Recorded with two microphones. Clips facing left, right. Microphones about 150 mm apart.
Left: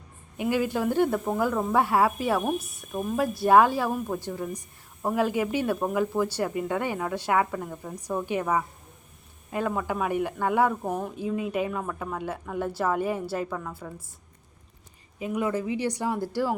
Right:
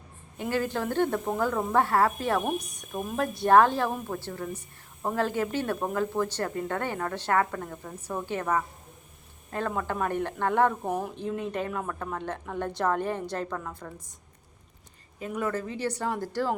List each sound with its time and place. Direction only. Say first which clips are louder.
0.3 s speech: left 3 dB; 10° left (ahead or behind)
2.4 s speech: left 2 dB; centre (ahead or behind)
15.2 s speech: left 3 dB; 10° left (ahead or behind)